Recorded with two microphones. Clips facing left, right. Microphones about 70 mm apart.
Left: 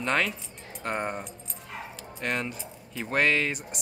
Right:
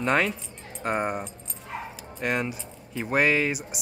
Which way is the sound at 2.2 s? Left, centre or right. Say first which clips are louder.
Right 3 dB; centre.